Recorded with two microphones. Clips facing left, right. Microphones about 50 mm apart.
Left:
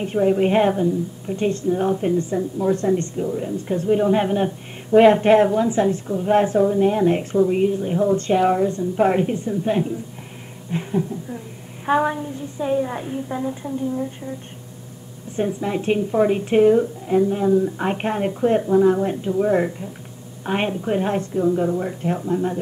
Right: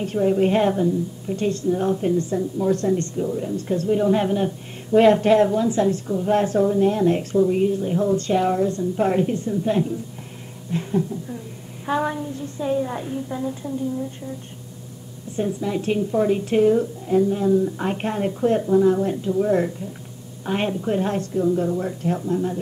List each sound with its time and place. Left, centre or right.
0.0 s a woman's voice: left
1.3 s a woman's voice: left
10.7 s a sound: centre
12.0 s a woman's voice: centre
15.3 s a woman's voice: left